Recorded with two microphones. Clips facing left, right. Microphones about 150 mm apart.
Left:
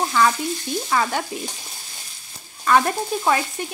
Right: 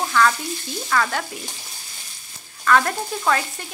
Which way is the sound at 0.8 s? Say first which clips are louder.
Even; 20° left (ahead or behind).